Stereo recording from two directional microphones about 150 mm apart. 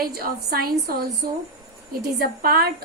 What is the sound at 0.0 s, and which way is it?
Speech, 85° right.